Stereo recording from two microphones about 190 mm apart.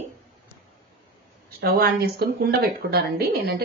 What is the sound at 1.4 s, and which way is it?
A woman's voice, 55° right (ahead or behind).